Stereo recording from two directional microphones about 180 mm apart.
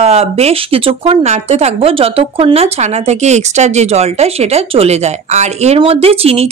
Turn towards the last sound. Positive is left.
turn(degrees=-35)  # may be behind; listen again after turning